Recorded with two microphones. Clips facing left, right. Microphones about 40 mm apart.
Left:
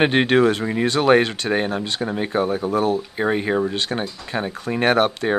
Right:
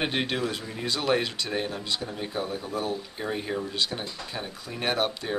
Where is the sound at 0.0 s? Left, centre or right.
Left.